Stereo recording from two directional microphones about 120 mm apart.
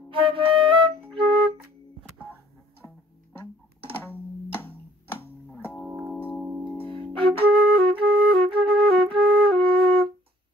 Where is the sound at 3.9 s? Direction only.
15° left (ahead or behind).